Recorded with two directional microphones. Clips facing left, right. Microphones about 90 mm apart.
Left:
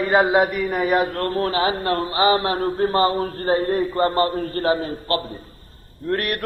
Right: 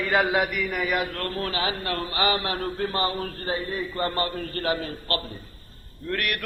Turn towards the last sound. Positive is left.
turn(degrees=35)  # may be behind; listen again after turning